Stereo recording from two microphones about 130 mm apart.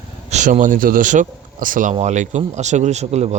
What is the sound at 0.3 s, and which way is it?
Speech, 60° right (ahead or behind).